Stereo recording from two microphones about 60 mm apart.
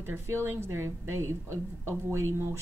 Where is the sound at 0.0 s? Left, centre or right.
Right.